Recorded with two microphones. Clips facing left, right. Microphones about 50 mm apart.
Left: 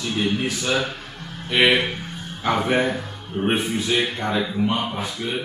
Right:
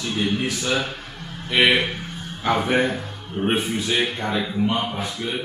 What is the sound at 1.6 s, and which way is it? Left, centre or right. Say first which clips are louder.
Speech: even; left.